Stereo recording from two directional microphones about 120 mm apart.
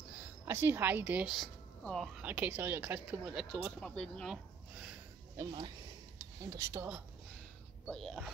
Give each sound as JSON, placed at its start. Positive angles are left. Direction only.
{"t": 0.5, "sound": "speech", "side_deg": -20}
{"t": 1.3, "sound": "a sound", "side_deg": 0}
{"t": 2.2, "sound": "speech", "side_deg": -15}
{"t": 3.8, "sound": "speech", "side_deg": 5}
{"t": 5.4, "sound": "speech", "side_deg": -25}
{"t": 7.8, "sound": "speech", "side_deg": 5}